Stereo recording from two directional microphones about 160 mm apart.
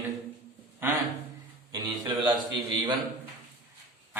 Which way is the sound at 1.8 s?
25° right (ahead or behind).